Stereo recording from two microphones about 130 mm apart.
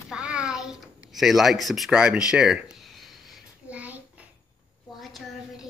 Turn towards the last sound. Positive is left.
turn(degrees=-10)  # may be behind; listen again after turning